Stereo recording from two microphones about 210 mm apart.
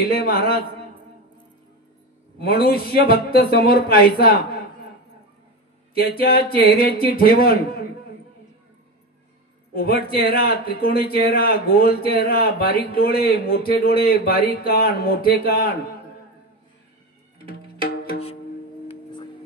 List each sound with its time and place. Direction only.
0.0 s a man's voice: 45° left (ahead or behind)
2.4 s a man's voice: 45° left (ahead or behind)
5.9 s a man's voice: 45° left (ahead or behind)
9.8 s a man's voice: 45° left (ahead or behind)
17.5 s music: 45° left (ahead or behind)